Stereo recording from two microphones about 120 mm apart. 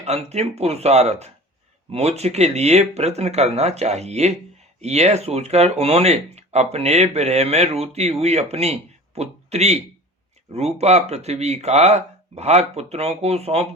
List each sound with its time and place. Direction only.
0.0 s speech: 65° right (ahead or behind)